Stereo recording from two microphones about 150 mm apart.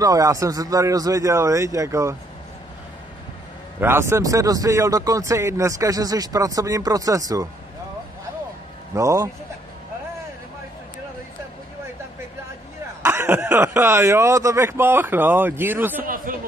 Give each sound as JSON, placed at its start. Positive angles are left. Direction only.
{"t": 0.0, "sound": "speech", "side_deg": -25}
{"t": 3.8, "sound": "speech", "side_deg": -15}
{"t": 8.9, "sound": "speech", "side_deg": -20}
{"t": 13.0, "sound": "speech", "side_deg": -15}
{"t": 16.0, "sound": "speech", "side_deg": -70}